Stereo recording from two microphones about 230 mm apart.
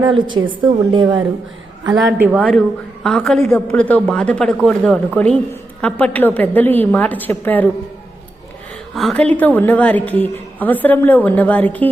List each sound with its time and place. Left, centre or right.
0.0 s a woman's voice: centre
2.0 s a woman's voice: centre
2.4 s a woman's voice: centre
9.0 s a woman's voice: centre